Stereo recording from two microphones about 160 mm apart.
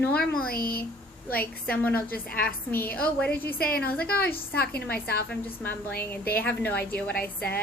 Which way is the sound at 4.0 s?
75° left (ahead or behind).